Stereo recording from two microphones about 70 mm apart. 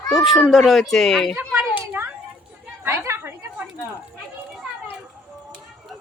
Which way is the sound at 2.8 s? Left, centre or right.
Right.